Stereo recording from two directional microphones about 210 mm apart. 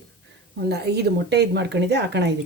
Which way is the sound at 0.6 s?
50° right (ahead or behind).